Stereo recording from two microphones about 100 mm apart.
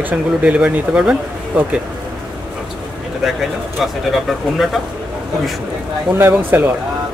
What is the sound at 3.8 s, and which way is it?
Speech, centre (ahead or behind).